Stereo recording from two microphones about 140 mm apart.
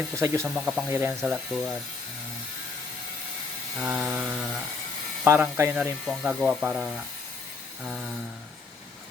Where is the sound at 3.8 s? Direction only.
Centre (ahead or behind).